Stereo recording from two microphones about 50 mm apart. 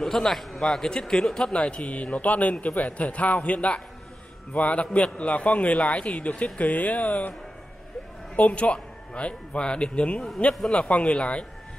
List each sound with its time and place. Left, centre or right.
0.0 s a man's voice: centre
1.6 s a man's voice: left
8.4 s a man's voice: left